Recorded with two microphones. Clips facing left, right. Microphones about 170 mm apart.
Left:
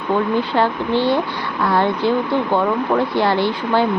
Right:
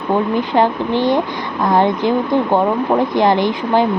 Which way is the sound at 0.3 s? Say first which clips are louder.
Right 3 dB; 15° right (ahead or behind).